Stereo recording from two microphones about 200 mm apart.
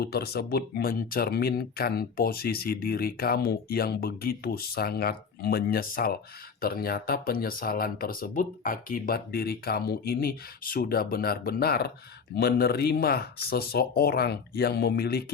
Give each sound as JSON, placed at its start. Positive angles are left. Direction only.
{"t": 0.0, "sound": "speech", "side_deg": 50}